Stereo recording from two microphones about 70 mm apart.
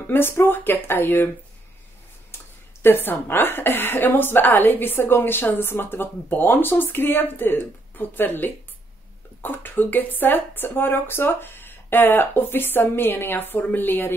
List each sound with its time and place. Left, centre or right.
0.0 s a woman's voice: left
2.3 s a woman's voice: left